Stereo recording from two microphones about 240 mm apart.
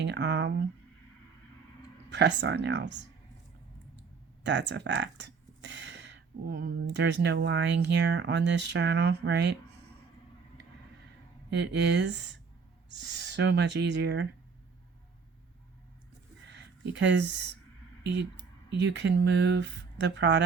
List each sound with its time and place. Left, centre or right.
0.0 s speech: right
2.0 s speech: right
4.4 s speech: right
11.5 s speech: right
16.9 s speech: right
18.0 s speech: right
18.8 s speech: right